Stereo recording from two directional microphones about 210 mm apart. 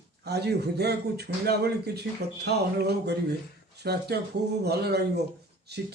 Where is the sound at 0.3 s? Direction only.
50° right (ahead or behind).